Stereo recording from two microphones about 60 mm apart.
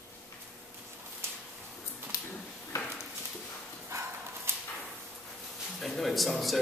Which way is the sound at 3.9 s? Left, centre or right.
Right.